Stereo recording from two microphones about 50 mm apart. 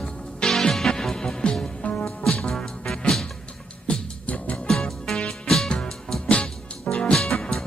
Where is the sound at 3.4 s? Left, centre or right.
Left.